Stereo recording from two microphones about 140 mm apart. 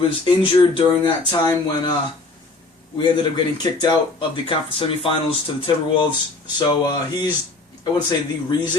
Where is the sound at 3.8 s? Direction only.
30° left (ahead or behind).